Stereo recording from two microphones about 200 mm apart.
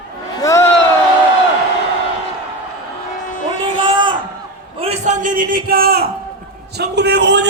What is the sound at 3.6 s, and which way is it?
A man's voice, 25° right (ahead or behind).